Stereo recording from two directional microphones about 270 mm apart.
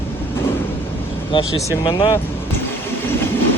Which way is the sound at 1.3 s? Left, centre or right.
Centre.